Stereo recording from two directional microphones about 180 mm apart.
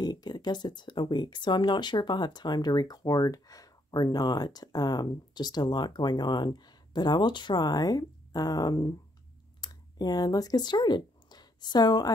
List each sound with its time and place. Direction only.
0.0 s speech: 25° left (ahead or behind)